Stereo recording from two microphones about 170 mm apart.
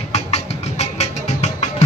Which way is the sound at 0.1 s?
40° left (ahead or behind).